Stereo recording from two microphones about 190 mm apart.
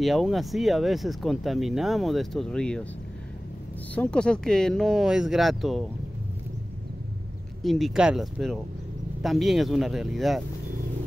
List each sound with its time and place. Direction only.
0.0 s speech: centre (ahead or behind)
3.9 s speech: 5° left (ahead or behind)
7.6 s speech: centre (ahead or behind)